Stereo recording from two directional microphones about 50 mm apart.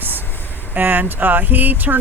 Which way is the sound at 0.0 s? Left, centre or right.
Right.